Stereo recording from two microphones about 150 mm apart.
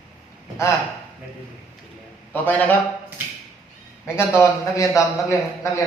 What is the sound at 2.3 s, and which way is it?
Speech, 10° left (ahead or behind).